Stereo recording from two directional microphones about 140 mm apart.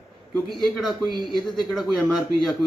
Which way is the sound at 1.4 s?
5° left (ahead or behind).